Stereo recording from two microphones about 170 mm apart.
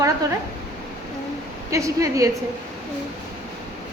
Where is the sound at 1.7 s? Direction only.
20° right (ahead or behind).